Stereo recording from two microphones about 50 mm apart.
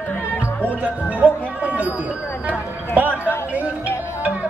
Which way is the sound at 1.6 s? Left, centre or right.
Right.